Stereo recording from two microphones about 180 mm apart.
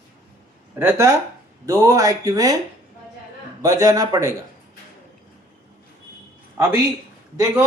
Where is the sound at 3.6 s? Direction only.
20° right (ahead or behind).